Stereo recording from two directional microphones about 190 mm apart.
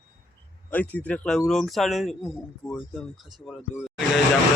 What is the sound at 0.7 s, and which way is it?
Speech, 10° left (ahead or behind).